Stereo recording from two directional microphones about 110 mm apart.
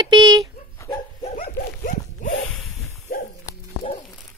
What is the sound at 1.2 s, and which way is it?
Dog, 90° left.